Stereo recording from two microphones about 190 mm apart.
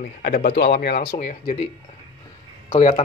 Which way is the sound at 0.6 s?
55° left (ahead or behind).